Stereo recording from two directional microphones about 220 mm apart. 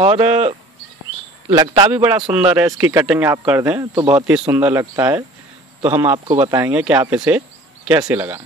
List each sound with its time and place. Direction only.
0.0 s speech: 25° right (ahead or behind)
1.5 s a man's voice: 15° right (ahead or behind)
4.1 s a man's voice: 5° right (ahead or behind)
6.1 s speech: 25° right (ahead or behind)
6.5 s speech: 10° right (ahead or behind)